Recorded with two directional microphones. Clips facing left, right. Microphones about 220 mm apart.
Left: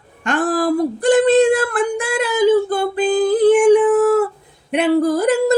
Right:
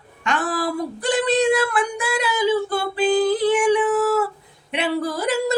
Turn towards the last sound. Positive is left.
turn(degrees=50)  # may be behind; listen again after turning